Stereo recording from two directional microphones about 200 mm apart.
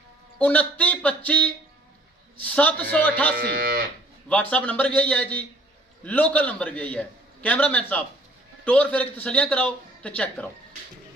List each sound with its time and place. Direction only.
0.3 s a man's voice: 5° left (ahead or behind)
3.3 s speech: 50° right (ahead or behind)
4.3 s a man's voice: 5° left (ahead or behind)